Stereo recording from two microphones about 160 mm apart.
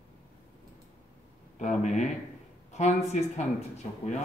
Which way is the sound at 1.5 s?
50° left (ahead or behind).